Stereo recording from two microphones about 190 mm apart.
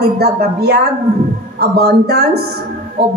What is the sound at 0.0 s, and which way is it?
A woman's voice, 55° right (ahead or behind).